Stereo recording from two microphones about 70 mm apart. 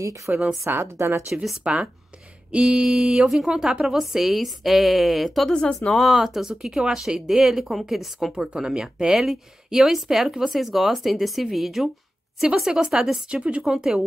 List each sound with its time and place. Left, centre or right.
0.3 s a woman's voice: right
0.7 s speech: right
1.3 s speech: centre
1.6 s a woman's voice: centre
5.5 s a woman's voice: centre
13.4 s a woman's voice: centre